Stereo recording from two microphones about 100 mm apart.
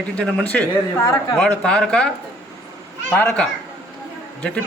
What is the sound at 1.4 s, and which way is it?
A man's voice, 10° left (ahead or behind).